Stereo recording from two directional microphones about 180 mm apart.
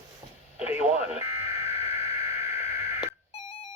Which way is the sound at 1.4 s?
15° right (ahead or behind).